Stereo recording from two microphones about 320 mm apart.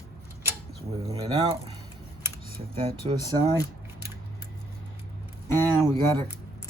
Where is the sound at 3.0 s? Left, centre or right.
Centre.